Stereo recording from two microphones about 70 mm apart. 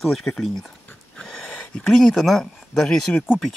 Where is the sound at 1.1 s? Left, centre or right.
Centre.